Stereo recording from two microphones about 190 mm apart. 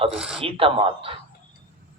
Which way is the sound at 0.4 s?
30° right (ahead or behind).